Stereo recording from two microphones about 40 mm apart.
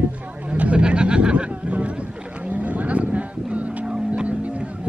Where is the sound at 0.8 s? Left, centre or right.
Right.